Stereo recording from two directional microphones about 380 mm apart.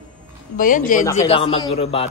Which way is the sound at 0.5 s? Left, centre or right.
Left.